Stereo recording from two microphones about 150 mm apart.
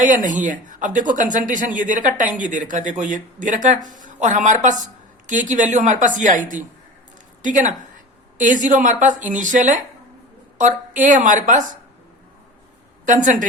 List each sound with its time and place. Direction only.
0.0 s a woman's voice: 60° right (ahead or behind)
13.1 s speech: 55° right (ahead or behind)